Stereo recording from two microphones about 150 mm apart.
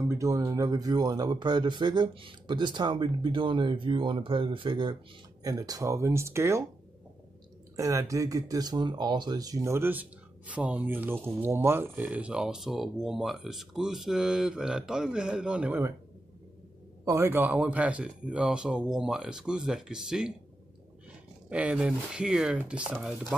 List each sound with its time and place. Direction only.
0.1 s speech: 20° right (ahead or behind)
7.7 s speech: 20° right (ahead or behind)
17.0 s speech: 20° right (ahead or behind)
21.5 s speech: 10° right (ahead or behind)